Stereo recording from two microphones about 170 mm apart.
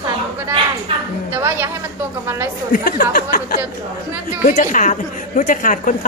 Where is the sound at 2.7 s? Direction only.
55° left (ahead or behind).